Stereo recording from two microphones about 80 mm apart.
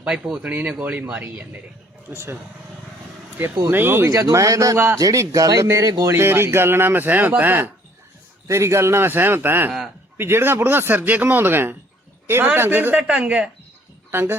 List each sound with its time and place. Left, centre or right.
0.0 s speech: centre
0.4 s speech: centre
2.0 s speech: right
3.7 s speech: right
4.1 s speech: right
6.1 s speech: right
8.4 s a man's voice: right
13.0 s speech: centre
14.1 s speech: right